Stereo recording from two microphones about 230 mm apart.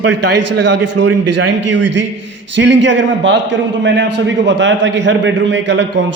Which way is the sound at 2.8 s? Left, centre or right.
Right.